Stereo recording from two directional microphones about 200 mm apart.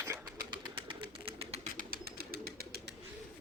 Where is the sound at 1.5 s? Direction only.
45° right (ahead or behind).